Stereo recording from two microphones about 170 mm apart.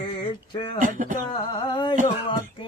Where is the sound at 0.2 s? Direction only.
30° left (ahead or behind).